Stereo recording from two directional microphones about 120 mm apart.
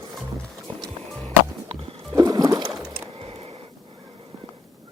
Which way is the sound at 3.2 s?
55° right (ahead or behind).